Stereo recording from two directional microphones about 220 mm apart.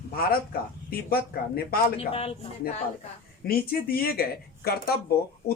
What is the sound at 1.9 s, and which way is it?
Speech, 25° left (ahead or behind).